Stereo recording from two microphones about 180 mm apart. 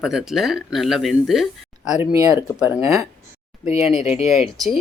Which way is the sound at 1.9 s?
20° right (ahead or behind).